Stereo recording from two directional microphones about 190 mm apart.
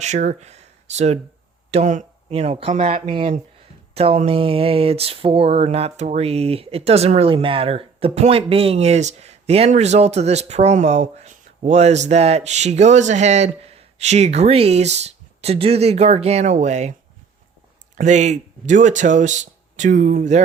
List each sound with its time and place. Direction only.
0.0 s speech: 40° right (ahead or behind)
17.9 s speech: 40° right (ahead or behind)